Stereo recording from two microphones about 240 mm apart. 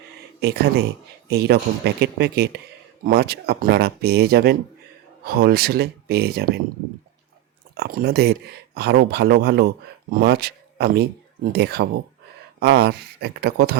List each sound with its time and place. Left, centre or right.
0.3 s speech: right
7.8 s speech: right